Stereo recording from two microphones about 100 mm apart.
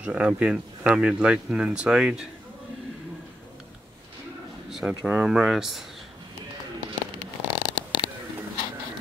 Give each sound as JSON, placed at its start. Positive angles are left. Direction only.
{"t": 0.0, "sound": "speech", "side_deg": -15}
{"t": 4.6, "sound": "speech", "side_deg": -5}
{"t": 7.4, "sound": "a sound", "side_deg": 45}